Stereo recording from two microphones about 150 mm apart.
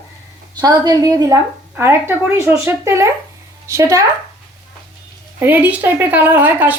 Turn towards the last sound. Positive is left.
turn(degrees=-10)  # may be behind; listen again after turning